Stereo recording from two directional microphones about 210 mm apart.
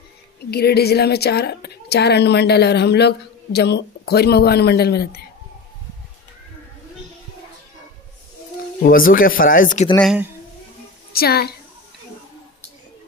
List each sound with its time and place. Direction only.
0.5 s a woman's voice: 50° left (ahead or behind)
8.8 s speech: 40° left (ahead or behind)
11.1 s a woman's voice: 50° left (ahead or behind)